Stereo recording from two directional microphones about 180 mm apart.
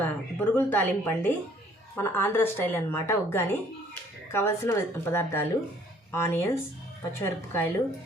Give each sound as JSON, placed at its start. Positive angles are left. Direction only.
{"t": 0.0, "sound": "a woman's voice", "side_deg": 10}